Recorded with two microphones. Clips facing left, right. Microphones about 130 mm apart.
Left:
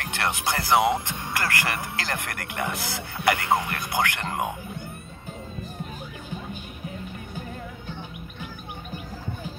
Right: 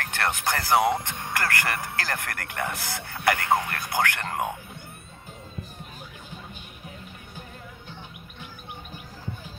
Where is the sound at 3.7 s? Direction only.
15° left (ahead or behind).